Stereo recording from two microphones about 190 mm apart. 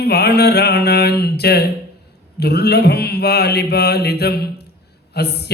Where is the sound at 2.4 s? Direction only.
60° left (ahead or behind).